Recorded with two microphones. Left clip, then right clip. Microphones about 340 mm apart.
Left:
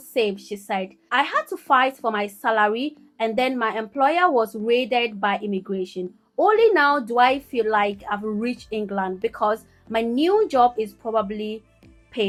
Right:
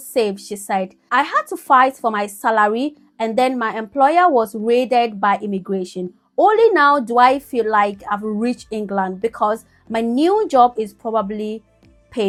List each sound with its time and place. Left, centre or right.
0.1 s a woman's voice: right